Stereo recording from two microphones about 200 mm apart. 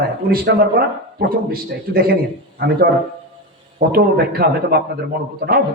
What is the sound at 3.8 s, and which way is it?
A man's voice, 50° right (ahead or behind).